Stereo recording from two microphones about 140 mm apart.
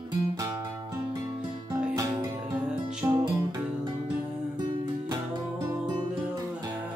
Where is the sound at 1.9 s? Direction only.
25° right (ahead or behind).